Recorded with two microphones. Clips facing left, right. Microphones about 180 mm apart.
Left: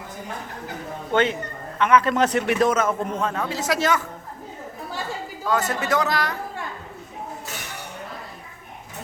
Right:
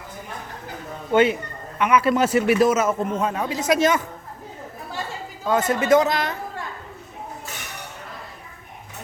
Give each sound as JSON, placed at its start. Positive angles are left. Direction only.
{"t": 1.1, "sound": "a man's voice", "side_deg": -10}
{"t": 5.5, "sound": "a man's voice", "side_deg": -20}